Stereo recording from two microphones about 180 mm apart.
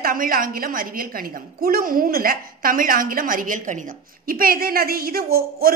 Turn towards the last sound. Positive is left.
turn(degrees=-55)  # may be behind; listen again after turning